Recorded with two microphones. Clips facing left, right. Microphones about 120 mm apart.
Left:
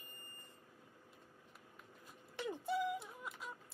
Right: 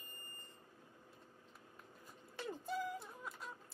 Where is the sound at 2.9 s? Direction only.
Centre (ahead or behind).